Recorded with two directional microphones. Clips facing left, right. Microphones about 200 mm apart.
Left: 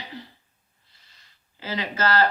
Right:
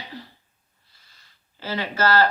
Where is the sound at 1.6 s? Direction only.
15° left (ahead or behind).